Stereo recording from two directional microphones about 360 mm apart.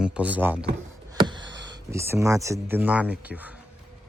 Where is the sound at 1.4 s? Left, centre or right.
Right.